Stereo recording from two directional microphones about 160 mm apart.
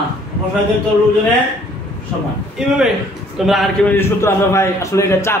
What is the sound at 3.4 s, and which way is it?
Speech, centre (ahead or behind).